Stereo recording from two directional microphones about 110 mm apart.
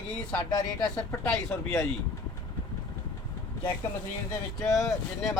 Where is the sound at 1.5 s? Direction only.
20° left (ahead or behind).